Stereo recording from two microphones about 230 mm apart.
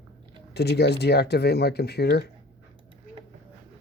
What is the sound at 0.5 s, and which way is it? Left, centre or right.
Speech, left.